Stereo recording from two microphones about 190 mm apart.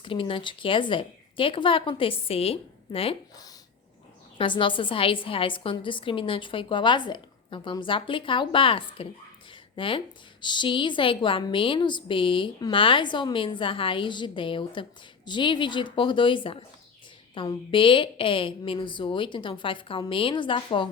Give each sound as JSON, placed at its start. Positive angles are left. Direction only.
{"t": 0.0, "sound": "a woman's voice", "side_deg": 25}